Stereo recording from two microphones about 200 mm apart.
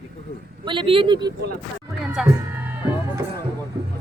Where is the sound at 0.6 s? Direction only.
25° right (ahead or behind).